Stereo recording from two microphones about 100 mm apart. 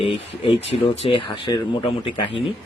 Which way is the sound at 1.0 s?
60° left (ahead or behind).